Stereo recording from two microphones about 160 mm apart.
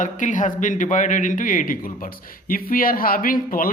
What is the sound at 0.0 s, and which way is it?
A man's voice, 55° left (ahead or behind).